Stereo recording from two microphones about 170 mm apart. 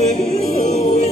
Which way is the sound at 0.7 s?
40° left (ahead or behind).